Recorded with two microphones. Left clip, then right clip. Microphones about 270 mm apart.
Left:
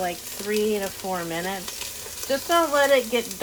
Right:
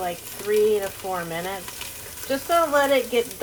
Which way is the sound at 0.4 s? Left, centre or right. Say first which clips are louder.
Right 4 dB; left.